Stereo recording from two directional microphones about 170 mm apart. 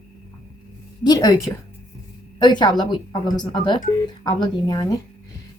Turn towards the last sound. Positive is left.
turn(degrees=25)  # may be behind; listen again after turning